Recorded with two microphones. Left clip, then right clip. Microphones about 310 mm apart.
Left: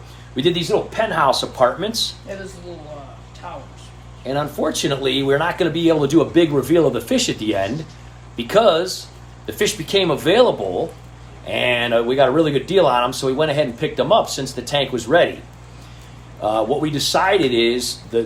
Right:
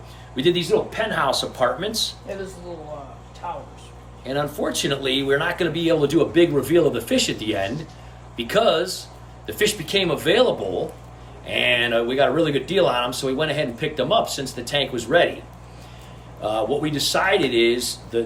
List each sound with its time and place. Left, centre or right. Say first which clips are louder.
0.3 s speech: left 1 dB; centre
4.2 s speech: left 3 dB; centre
16.4 s speech: left 4 dB; centre